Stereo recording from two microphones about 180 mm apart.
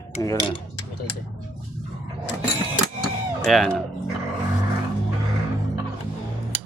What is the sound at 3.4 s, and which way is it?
Speech, centre (ahead or behind).